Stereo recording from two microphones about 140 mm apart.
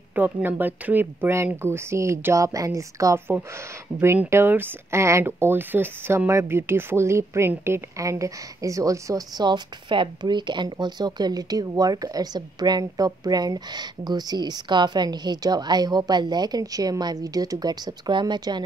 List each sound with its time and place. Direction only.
0.1 s speech: 15° right (ahead or behind); by 18.6 s 30° right (ahead or behind)